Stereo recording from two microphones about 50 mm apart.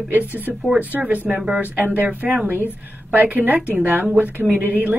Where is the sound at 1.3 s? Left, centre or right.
Right.